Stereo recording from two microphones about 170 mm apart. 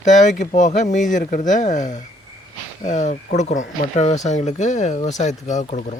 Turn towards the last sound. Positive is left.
turn(degrees=45)  # may be behind; listen again after turning